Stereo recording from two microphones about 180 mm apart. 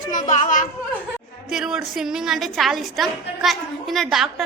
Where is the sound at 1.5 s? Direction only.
5° right (ahead or behind).